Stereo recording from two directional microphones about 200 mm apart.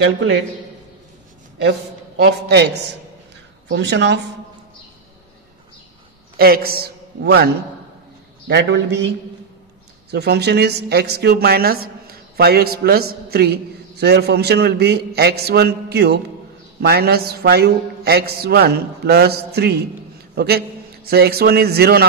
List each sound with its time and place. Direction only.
0.0 s speech: 60° right (ahead or behind)
1.7 s a man's voice: 55° right (ahead or behind)
3.6 s speech: 60° right (ahead or behind)
6.3 s a man's voice: 50° right (ahead or behind)
8.5 s speech: 60° right (ahead or behind)
10.1 s a woman's voice: 55° right (ahead or behind)